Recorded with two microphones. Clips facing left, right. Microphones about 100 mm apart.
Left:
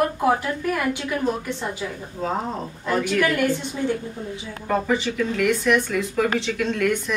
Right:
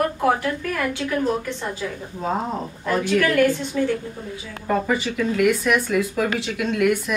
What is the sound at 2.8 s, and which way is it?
Speech, 15° left (ahead or behind).